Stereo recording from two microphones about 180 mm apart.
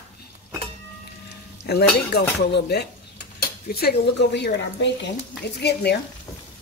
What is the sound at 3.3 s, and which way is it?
Speech, 60° left (ahead or behind).